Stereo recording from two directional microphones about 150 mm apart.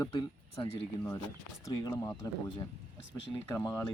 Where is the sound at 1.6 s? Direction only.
20° left (ahead or behind).